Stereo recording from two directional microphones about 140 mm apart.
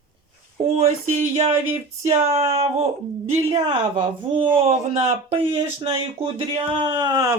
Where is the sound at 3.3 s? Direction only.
45° right (ahead or behind); by 7.4 s 25° right (ahead or behind).